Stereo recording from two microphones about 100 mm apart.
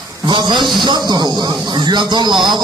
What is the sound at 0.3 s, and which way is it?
Speech, 50° right (ahead or behind).